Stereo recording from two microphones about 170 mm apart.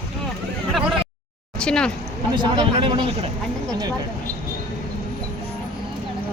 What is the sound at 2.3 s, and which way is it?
Speech, 25° right (ahead or behind).